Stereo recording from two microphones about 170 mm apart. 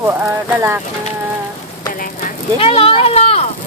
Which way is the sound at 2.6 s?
35° left (ahead or behind).